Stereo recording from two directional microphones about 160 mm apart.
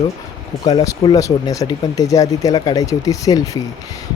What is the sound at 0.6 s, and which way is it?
Speech, 25° left (ahead or behind).